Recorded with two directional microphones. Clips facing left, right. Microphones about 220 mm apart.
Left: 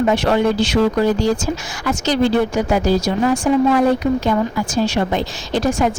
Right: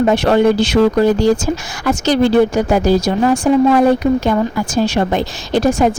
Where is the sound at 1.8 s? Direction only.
55° right (ahead or behind).